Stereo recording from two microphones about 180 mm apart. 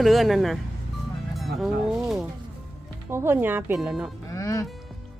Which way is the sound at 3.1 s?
15° right (ahead or behind).